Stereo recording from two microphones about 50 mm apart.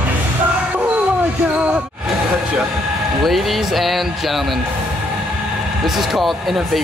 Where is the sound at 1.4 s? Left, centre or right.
Right.